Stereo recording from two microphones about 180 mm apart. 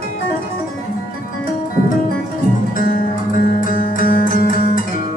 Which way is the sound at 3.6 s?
50° left (ahead or behind).